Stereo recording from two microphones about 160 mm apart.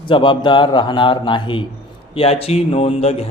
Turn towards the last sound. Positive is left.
turn(degrees=40)  # may be behind; listen again after turning